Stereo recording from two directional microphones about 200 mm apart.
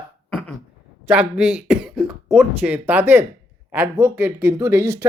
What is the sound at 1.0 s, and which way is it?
Speech, 5° right (ahead or behind).